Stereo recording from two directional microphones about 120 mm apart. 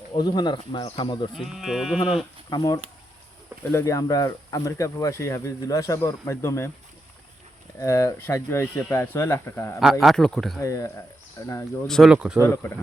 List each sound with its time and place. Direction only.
0.2 s speech: 35° left (ahead or behind)
1.4 s speech: 5° right (ahead or behind)
2.5 s speech: 35° left (ahead or behind)
7.8 s speech: 25° left (ahead or behind)
9.8 s speech: centre (ahead or behind)
10.6 s speech: 25° left (ahead or behind)
11.9 s speech: 5° left (ahead or behind)
12.1 s speech: 10° right (ahead or behind)
12.4 s speech: 25° left (ahead or behind)